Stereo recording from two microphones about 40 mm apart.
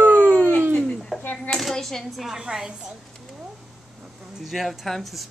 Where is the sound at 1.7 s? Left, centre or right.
Centre.